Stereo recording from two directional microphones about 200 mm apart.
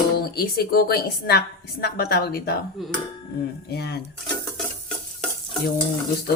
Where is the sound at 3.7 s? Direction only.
55° left (ahead or behind).